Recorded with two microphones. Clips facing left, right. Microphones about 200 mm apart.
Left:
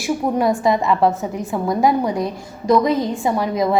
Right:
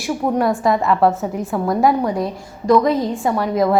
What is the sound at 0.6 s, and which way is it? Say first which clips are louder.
Speech: even; 15° left (ahead or behind).